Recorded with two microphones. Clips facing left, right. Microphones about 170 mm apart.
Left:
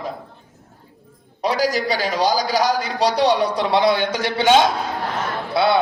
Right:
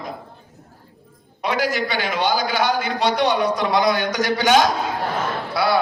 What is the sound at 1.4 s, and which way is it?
A man's voice, 35° left (ahead or behind).